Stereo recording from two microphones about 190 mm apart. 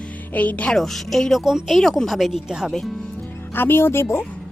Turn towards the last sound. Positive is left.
turn(degrees=15)  # may be behind; listen again after turning